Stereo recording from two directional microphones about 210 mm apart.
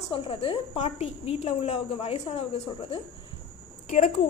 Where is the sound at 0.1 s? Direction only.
25° left (ahead or behind).